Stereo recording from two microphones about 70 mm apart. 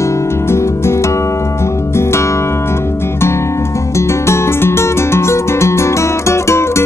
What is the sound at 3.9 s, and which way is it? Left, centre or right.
Music, left.